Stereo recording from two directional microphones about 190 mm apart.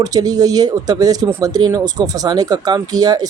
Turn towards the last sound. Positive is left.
turn(degrees=-20)  # may be behind; listen again after turning